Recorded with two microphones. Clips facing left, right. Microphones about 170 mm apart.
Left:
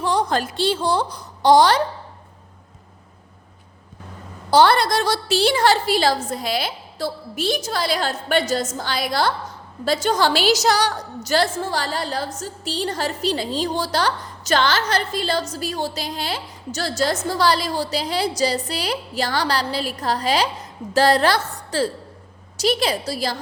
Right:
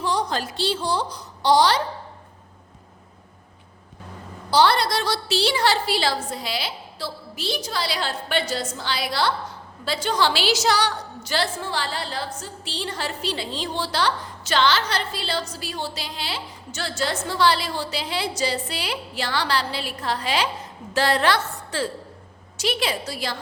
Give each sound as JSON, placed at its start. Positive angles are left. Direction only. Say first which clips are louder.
{"t": 0.0, "sound": "a woman's voice", "louder": "left 4 dB", "side_deg": 50}
{"t": 4.5, "sound": "a woman's voice", "louder": "left 4 dB", "side_deg": 50}